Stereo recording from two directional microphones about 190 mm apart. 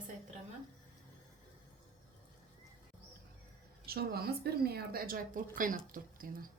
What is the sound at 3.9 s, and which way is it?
Speech, 55° right (ahead or behind).